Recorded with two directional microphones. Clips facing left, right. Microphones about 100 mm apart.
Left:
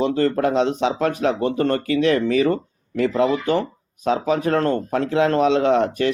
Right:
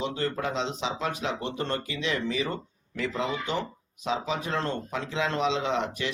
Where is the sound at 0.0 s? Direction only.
55° left (ahead or behind).